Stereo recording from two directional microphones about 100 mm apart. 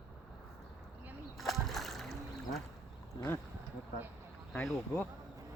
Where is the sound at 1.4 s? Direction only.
Centre (ahead or behind).